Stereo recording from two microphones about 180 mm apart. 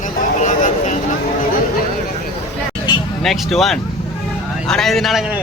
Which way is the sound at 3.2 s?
Centre (ahead or behind).